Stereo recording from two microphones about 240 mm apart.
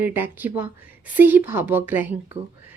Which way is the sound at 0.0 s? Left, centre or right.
Centre.